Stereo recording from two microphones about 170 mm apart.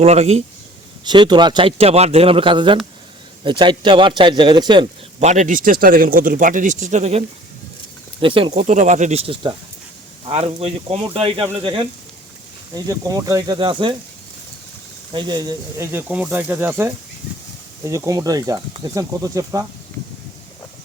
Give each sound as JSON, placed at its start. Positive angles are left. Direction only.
{"t": 0.0, "sound": "speech", "side_deg": -40}
{"t": 1.0, "sound": "a man's voice", "side_deg": -25}
{"t": 5.2, "sound": "a man's voice", "side_deg": -45}
{"t": 15.1, "sound": "a man's voice", "side_deg": -25}